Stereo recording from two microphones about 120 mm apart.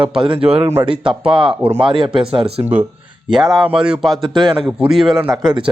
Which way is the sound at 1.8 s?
45° right (ahead or behind).